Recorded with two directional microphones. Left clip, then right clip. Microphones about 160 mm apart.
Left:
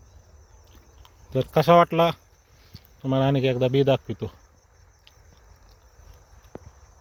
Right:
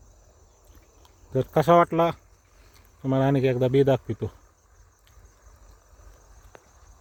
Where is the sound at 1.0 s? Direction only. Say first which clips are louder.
Left 1 dB; 10° right (ahead or behind).